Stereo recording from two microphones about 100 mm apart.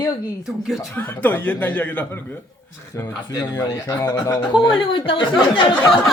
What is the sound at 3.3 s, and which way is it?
Speech, 35° left (ahead or behind).